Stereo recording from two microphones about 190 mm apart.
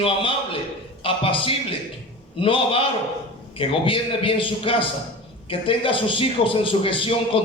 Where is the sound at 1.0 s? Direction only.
30° left (ahead or behind).